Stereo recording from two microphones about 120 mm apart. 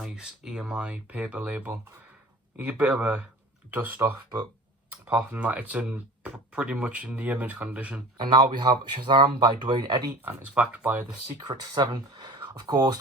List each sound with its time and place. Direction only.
0.0 s speech: 5° right (ahead or behind)
5.1 s speech: 10° right (ahead or behind)
8.2 s speech: 35° right (ahead or behind)
10.2 s speech: 10° right (ahead or behind)
11.3 s speech: 35° right (ahead or behind)